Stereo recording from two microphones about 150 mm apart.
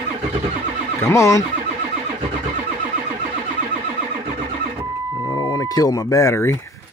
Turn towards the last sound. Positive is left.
turn(degrees=20)  # may be behind; listen again after turning